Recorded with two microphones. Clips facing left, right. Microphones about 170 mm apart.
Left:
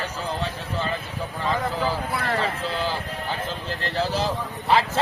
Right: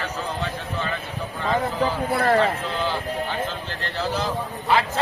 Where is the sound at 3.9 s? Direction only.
35° left (ahead or behind).